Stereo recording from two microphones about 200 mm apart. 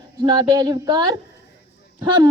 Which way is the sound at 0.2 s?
20° right (ahead or behind).